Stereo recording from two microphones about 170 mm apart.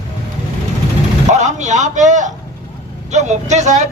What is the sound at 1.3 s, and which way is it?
Speech, 45° right (ahead or behind).